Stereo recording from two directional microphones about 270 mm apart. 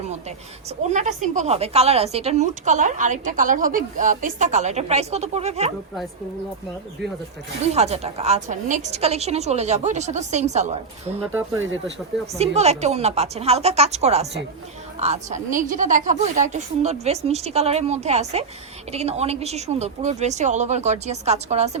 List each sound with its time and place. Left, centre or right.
0.8 s a woman's voice: right
7.6 s a woman's voice: right
11.2 s speech: centre
12.4 s a woman's voice: right